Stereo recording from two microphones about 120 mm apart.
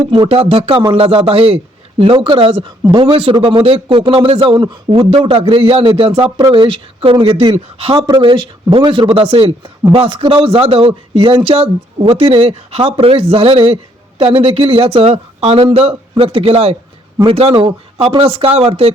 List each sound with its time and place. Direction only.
0.1 s a man's voice: 50° right (ahead or behind)